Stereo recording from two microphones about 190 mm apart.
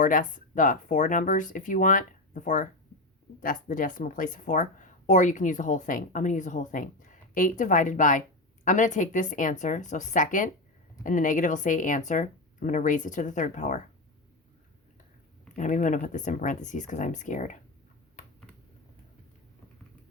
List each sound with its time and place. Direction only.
0.0 s speech: 45° left (ahead or behind)
15.5 s speech: 40° left (ahead or behind)